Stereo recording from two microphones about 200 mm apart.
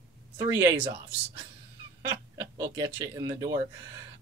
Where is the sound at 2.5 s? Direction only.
20° right (ahead or behind).